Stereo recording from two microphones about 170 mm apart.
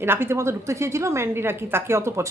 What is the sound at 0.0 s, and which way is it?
A woman's voice, 15° right (ahead or behind).